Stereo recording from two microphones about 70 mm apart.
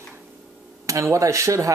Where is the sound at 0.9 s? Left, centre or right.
Right.